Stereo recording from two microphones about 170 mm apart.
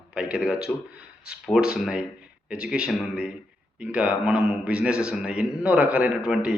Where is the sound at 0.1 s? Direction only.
5° right (ahead or behind).